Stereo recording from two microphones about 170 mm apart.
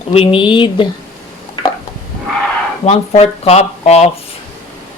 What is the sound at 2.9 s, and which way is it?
Speech, 40° left (ahead or behind).